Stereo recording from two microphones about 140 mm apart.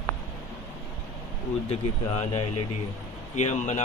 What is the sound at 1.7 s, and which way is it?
A man's voice, 45° left (ahead or behind).